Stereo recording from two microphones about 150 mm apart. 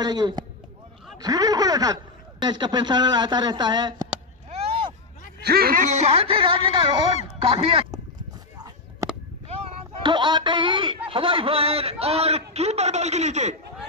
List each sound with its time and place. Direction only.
0.0 s speech: 25° right (ahead or behind)
4.5 s vehicle: 40° right (ahead or behind)
5.4 s speech: 90° right
5.9 s speech: 45° right (ahead or behind)
10.0 s a man's voice: 30° right (ahead or behind); by 13.6 s 50° right (ahead or behind)